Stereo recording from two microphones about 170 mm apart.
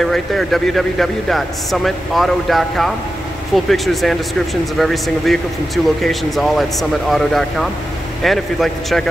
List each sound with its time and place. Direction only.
0.0 s a man's voice: centre (ahead or behind)